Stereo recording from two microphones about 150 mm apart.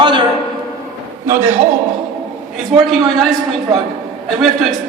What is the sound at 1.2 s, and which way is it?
Speech, 15° right (ahead or behind).